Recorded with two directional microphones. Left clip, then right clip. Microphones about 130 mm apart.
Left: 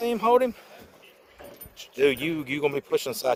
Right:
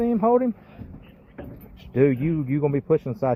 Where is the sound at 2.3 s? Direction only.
40° left (ahead or behind).